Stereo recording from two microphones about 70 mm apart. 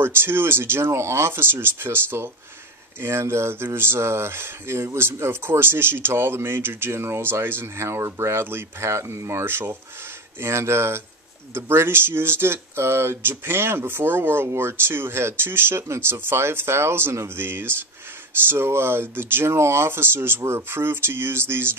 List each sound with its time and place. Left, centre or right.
0.0 s speech: right